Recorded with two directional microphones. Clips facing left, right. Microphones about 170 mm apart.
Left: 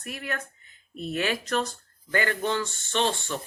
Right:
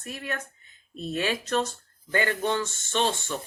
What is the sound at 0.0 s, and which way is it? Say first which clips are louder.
A woman's voice: even; 25° right (ahead or behind).